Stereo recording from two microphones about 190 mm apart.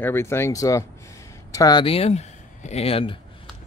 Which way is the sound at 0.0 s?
10° left (ahead or behind).